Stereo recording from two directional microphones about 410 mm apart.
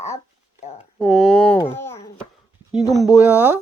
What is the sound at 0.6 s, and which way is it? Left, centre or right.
Speech, centre.